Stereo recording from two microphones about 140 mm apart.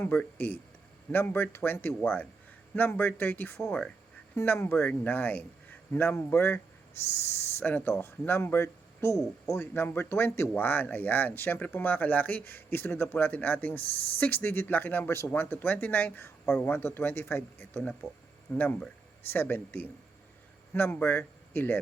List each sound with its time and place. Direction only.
0.0 s speech: 15° left (ahead or behind)